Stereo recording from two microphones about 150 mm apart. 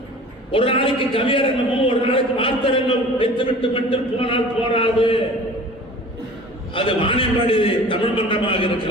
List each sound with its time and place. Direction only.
0.5 s a man's voice: 35° left (ahead or behind)
6.7 s a man's voice: 35° left (ahead or behind)